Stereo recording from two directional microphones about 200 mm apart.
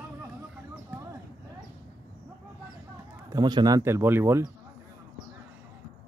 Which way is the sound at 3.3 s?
20° right (ahead or behind).